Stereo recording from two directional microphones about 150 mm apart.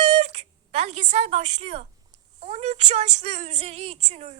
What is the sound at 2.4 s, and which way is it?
Female singing, 50° right (ahead or behind).